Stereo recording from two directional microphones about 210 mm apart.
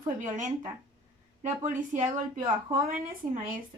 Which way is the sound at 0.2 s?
35° right (ahead or behind).